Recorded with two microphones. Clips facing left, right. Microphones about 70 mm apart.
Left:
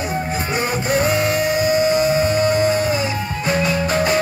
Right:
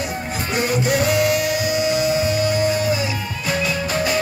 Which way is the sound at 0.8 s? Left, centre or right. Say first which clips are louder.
Left 1 dB; left.